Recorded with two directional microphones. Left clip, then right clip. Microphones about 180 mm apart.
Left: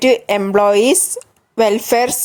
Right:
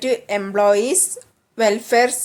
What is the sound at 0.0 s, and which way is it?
Speech, 35° left (ahead or behind).